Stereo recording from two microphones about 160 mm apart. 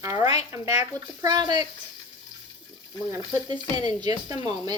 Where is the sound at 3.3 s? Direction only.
25° right (ahead or behind).